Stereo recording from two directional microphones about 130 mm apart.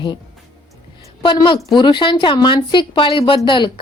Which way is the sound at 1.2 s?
40° left (ahead or behind).